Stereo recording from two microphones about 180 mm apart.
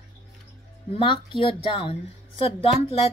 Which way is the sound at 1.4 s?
30° left (ahead or behind).